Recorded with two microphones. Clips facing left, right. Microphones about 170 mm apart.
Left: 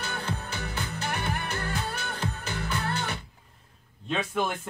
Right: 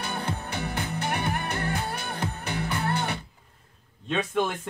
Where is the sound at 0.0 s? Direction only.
55° right (ahead or behind).